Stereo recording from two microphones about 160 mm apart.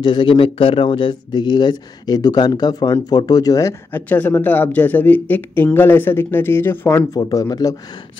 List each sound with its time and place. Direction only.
0.0 s speech: 30° left (ahead or behind); by 7.1 s 15° left (ahead or behind)
7.2 s speech: 25° left (ahead or behind)